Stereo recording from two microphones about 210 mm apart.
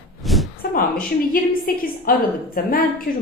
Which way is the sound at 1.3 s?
45° left (ahead or behind).